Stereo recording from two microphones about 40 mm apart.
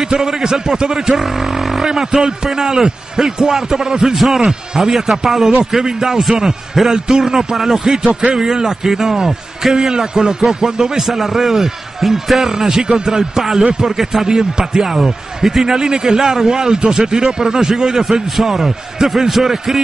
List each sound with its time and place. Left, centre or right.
0.0 s a man's voice: centre
8.1 s a man's voice: right
8.4 s a man's voice: centre